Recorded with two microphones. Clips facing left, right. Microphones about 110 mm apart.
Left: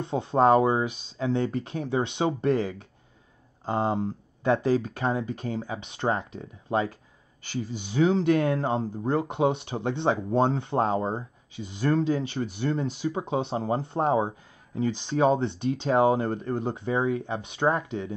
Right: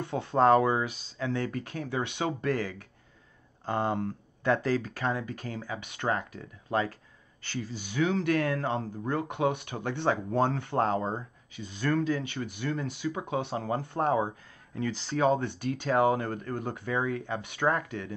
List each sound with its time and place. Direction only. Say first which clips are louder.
0.0 s speech: left 2 dB; 20° left (ahead or behind)